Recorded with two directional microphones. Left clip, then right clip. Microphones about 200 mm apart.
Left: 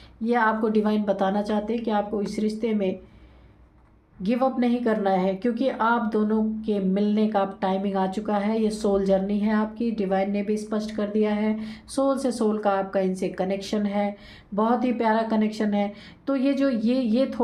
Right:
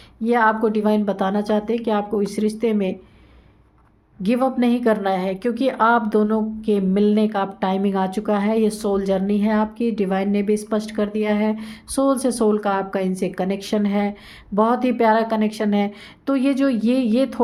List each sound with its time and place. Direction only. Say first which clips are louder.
0.3 s speech: right 5 dB; 30° right (ahead or behind)
4.2 s speech: right 4 dB; 35° right (ahead or behind)